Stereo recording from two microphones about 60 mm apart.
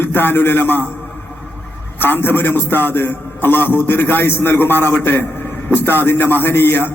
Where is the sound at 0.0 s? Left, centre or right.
Left.